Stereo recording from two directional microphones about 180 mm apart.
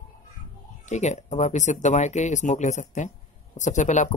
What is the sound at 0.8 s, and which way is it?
Speech, 40° left (ahead or behind).